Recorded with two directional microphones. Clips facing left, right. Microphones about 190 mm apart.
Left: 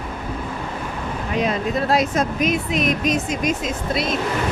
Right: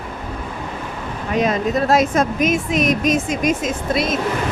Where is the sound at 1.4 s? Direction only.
45° right (ahead or behind).